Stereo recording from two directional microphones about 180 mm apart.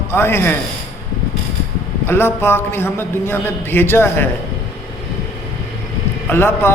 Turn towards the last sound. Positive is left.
turn(degrees=15)  # may be behind; listen again after turning